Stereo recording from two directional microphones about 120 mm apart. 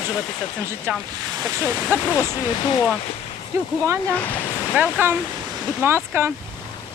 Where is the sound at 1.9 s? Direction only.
20° right (ahead or behind).